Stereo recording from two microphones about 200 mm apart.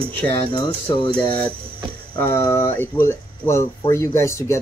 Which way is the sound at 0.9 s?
20° left (ahead or behind).